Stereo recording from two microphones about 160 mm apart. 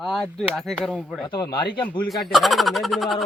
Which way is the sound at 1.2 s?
25° left (ahead or behind).